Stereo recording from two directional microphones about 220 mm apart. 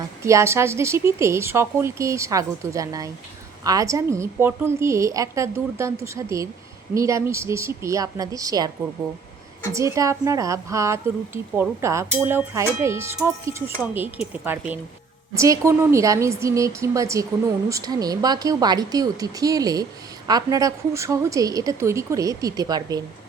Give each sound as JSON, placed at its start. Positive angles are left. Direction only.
{"t": 0.2, "sound": "speech", "side_deg": -15}
{"t": 9.7, "sound": "speech", "side_deg": -15}